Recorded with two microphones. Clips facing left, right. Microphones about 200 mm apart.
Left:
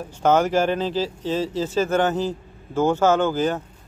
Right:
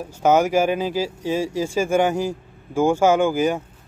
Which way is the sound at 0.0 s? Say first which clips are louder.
Right 1 dB; 10° right (ahead or behind).